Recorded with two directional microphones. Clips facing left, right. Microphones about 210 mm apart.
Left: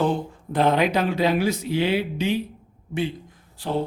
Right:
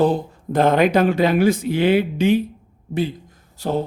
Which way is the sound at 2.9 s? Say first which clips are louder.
Right 3 dB; 40° right (ahead or behind).